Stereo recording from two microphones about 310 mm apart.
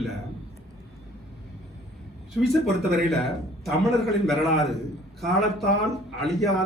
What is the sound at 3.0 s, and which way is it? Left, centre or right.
A man's voice, centre.